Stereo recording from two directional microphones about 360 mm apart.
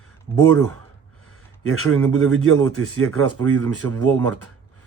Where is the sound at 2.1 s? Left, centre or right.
Right.